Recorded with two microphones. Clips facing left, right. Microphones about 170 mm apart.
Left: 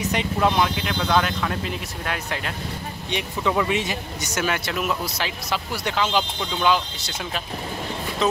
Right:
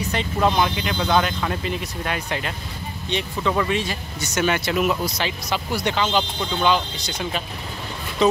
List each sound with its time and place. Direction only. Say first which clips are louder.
0.0 s vehicle: left 1 dB; 15° left (ahead or behind)
0.4 s speech: right 2 dB; centre (ahead or behind)
3.1 s speech: right 1 dB; 10° left (ahead or behind)
4.4 s speech: right 4 dB; centre (ahead or behind)